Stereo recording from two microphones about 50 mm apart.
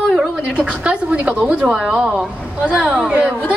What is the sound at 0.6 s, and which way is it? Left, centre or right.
A woman's voice, right.